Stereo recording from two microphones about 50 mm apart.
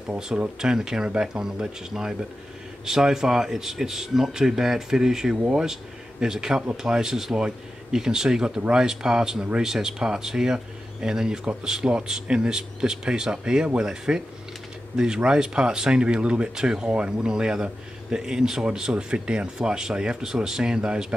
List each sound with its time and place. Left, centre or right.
0.6 s speech: centre